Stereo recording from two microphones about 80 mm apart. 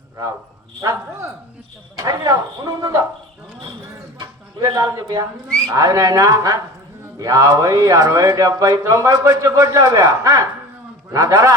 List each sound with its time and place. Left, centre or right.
2.0 s speech: right
4.2 s speech: right
5.5 s speech: centre
5.7 s speech: right